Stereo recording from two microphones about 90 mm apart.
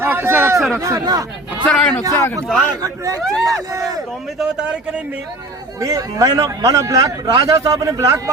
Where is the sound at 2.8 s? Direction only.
40° right (ahead or behind).